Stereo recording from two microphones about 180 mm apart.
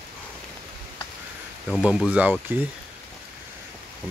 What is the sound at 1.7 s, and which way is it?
Speech, 5° right (ahead or behind).